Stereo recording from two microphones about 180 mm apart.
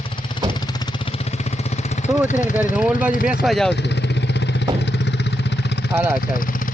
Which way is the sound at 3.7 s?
70° left (ahead or behind).